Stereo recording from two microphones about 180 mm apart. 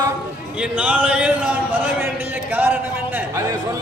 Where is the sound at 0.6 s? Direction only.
5° right (ahead or behind).